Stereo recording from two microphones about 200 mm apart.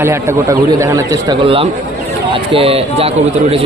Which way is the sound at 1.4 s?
25° right (ahead or behind).